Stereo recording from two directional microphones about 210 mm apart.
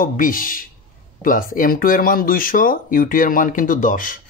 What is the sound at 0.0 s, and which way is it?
Speech, 40° left (ahead or behind).